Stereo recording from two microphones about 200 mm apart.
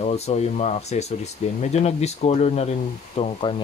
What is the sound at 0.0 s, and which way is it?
Speech, 35° left (ahead or behind).